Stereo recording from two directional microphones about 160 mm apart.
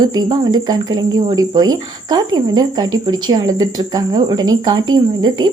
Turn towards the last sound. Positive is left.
turn(degrees=-25)  # may be behind; listen again after turning